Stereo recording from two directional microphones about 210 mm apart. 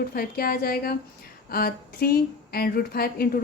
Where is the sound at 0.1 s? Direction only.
45° left (ahead or behind).